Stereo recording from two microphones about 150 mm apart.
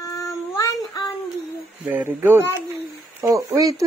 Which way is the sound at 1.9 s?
10° right (ahead or behind).